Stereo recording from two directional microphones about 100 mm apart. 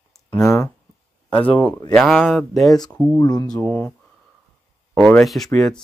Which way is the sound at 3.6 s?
30° left (ahead or behind).